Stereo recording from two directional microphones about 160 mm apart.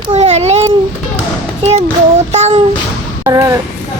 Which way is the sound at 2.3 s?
40° right (ahead or behind).